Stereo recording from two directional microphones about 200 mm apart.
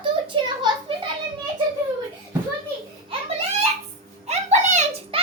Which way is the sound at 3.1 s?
30° right (ahead or behind).